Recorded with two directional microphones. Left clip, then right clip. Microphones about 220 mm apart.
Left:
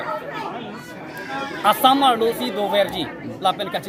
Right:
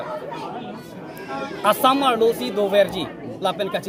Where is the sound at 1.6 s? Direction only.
30° right (ahead or behind).